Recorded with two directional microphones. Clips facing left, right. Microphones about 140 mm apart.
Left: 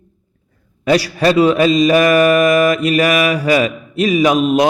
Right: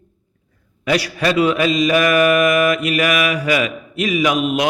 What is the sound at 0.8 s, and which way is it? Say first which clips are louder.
A man's voice: left 5 dB; 35° left (ahead or behind).